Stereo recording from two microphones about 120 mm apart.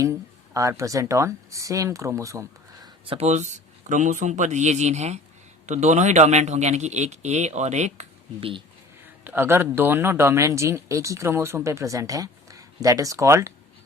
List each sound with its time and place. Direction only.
0.0 s speech: 25° right (ahead or behind)
3.1 s speech: 65° right (ahead or behind)
8.4 s speech: 50° right (ahead or behind)
9.2 s speech: 20° right (ahead or behind)